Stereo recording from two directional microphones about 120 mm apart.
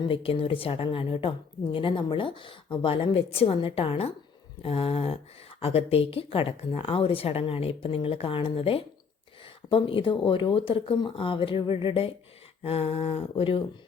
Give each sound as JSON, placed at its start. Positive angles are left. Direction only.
{"t": 0.0, "sound": "a woman's voice", "side_deg": 50}